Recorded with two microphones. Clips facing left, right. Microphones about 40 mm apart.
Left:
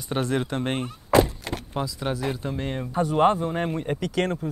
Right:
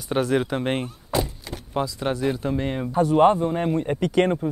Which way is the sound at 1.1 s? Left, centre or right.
Left.